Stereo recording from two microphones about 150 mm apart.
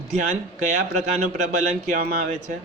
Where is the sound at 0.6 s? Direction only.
55° right (ahead or behind).